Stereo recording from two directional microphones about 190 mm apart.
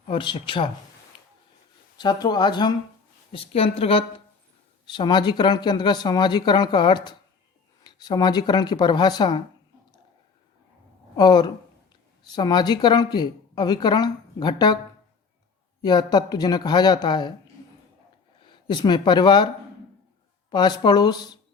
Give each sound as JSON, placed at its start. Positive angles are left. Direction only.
{"t": 0.1, "sound": "a woman's voice", "side_deg": 25}
{"t": 2.0, "sound": "a woman's voice", "side_deg": 20}
{"t": 11.2, "sound": "a woman's voice", "side_deg": 20}
{"t": 15.8, "sound": "a woman's voice", "side_deg": 20}
{"t": 18.3, "sound": "speech", "side_deg": 25}
{"t": 20.5, "sound": "a woman's voice", "side_deg": 20}